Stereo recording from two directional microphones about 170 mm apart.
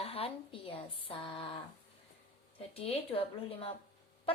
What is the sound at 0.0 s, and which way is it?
A woman's voice, 35° left (ahead or behind).